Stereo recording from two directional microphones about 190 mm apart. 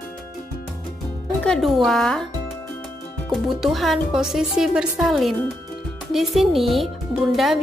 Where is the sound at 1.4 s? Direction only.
Centre (ahead or behind).